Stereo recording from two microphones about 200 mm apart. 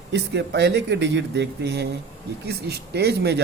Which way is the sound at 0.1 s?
60° right (ahead or behind).